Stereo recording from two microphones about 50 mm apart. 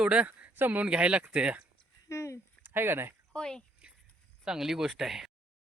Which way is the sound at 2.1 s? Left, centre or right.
Left.